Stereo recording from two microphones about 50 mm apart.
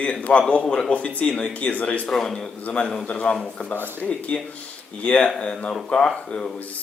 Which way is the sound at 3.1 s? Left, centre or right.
Left.